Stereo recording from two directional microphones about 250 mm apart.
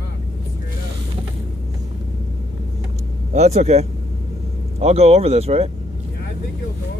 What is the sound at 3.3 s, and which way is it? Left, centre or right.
Speech, right.